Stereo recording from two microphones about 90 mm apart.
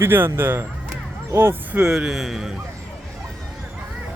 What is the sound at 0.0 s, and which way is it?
Speech, 25° right (ahead or behind).